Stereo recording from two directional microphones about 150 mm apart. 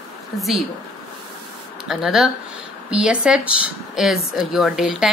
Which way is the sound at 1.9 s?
5° right (ahead or behind).